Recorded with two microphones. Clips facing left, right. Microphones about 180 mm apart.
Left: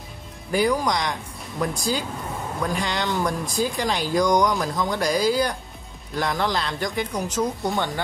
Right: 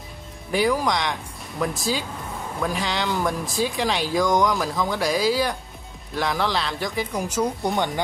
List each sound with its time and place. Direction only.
0.5 s speech: centre (ahead or behind); by 8.0 s 15° right (ahead or behind)